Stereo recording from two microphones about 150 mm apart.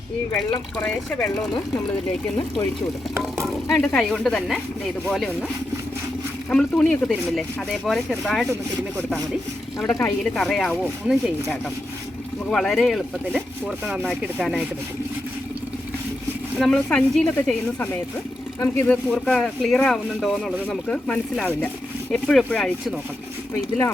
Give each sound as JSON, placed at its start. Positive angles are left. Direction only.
{"t": 0.8, "sound": "speech", "side_deg": 10}
{"t": 3.7, "sound": "speech", "side_deg": 10}
{"t": 6.5, "sound": "speech", "side_deg": 5}
{"t": 9.9, "sound": "speech", "side_deg": 15}
{"t": 10.3, "sound": "speech", "side_deg": 5}
{"t": 16.6, "sound": "speech", "side_deg": 5}
{"t": 19.1, "sound": "speech", "side_deg": 5}